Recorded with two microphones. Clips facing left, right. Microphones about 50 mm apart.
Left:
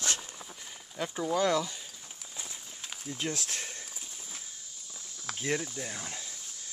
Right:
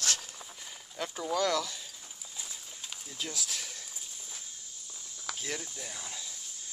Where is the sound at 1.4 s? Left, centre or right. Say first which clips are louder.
Left 2 dB; centre.